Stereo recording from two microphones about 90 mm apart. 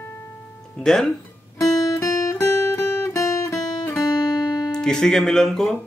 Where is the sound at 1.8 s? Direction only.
35° left (ahead or behind).